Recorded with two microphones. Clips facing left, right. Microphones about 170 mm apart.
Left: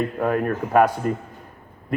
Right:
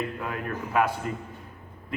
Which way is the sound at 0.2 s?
45° left (ahead or behind).